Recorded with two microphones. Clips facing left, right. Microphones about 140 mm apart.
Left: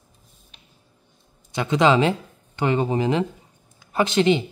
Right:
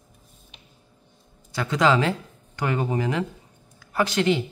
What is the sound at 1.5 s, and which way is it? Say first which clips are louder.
Speech: left 3 dB; 20° left (ahead or behind).